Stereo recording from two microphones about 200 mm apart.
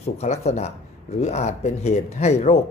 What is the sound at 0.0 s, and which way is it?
A man's voice, 35° left (ahead or behind).